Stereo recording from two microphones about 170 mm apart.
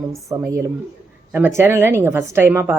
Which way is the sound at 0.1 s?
20° right (ahead or behind).